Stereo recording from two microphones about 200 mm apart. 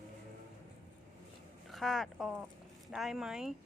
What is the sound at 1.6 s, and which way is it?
Speech, centre (ahead or behind).